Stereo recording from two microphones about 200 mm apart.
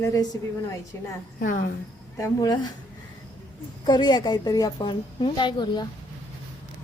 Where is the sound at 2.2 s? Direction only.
20° left (ahead or behind).